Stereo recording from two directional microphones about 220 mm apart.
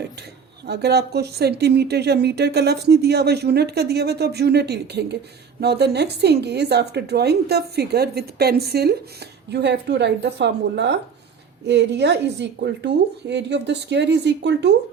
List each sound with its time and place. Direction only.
0.2 s speech: 50° right (ahead or behind)